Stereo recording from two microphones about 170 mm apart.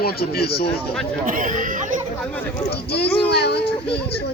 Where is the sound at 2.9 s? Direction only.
75° left (ahead or behind).